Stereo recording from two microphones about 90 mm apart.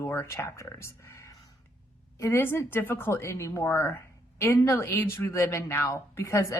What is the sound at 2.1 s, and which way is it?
A woman's voice, 30° left (ahead or behind).